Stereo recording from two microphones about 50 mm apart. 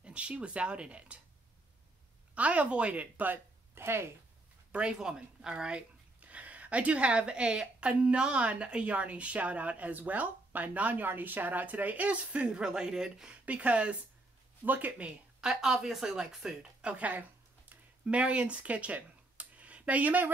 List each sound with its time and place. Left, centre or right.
0.0 s speech: right
2.3 s speech: right
3.7 s speech: right
4.7 s speech: centre
13.3 s speech: right
15.4 s speech: centre
16.8 s a sound: right
18.0 s speech: right
19.3 s a sound: right